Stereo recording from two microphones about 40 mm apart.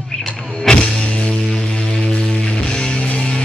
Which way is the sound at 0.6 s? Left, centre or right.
Left.